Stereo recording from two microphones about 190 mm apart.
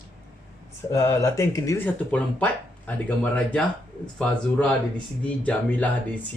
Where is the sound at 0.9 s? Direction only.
15° left (ahead or behind).